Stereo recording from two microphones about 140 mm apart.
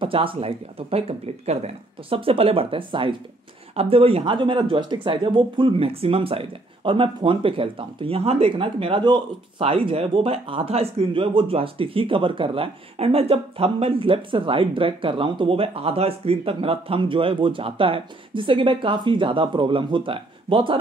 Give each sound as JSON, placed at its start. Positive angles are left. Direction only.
{"t": 0.0, "sound": "speech", "side_deg": -40}